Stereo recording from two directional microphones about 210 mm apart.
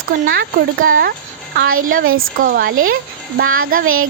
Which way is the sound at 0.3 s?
45° right (ahead or behind).